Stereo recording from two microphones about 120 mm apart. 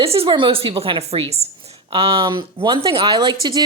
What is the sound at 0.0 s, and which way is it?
A woman's voice, 50° right (ahead or behind).